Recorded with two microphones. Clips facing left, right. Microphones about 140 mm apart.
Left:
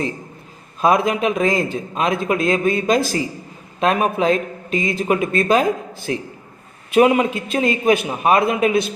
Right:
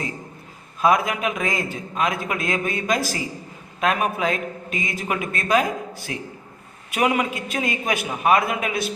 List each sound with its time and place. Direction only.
0.8 s a man's voice: 25° left (ahead or behind)